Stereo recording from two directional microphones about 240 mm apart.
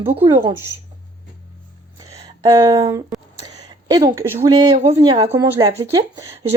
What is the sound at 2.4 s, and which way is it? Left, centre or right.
Speech, centre.